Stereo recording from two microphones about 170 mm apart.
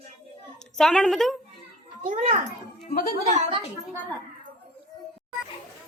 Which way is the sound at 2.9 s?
55° left (ahead or behind).